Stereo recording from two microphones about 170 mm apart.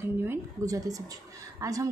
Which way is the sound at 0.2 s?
15° right (ahead or behind).